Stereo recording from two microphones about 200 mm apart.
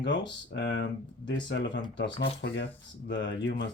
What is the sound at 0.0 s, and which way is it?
Speech, 65° left (ahead or behind).